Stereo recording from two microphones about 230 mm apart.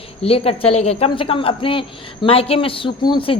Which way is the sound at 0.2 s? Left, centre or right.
Left.